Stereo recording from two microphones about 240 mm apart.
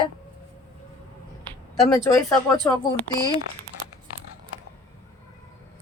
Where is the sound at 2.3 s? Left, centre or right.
Centre.